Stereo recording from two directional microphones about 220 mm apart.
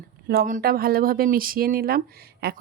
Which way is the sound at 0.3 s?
40° right (ahead or behind).